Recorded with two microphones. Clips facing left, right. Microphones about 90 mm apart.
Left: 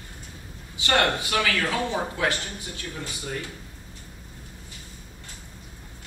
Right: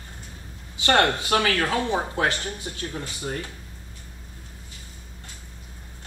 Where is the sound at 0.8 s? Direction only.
50° right (ahead or behind).